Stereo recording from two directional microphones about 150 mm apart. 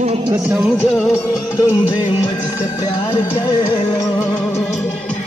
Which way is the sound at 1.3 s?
20° left (ahead or behind).